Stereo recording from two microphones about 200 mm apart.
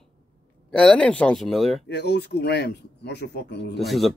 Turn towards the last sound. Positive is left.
turn(degrees=0)  # may be behind; listen again after turning